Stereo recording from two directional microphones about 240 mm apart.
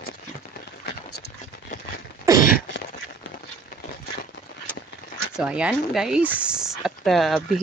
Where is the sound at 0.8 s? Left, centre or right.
Left.